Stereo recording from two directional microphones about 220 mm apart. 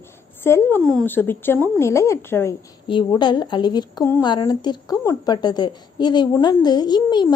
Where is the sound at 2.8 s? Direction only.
20° left (ahead or behind).